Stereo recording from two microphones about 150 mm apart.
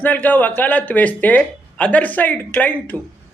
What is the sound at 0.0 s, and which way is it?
Speech, 10° left (ahead or behind).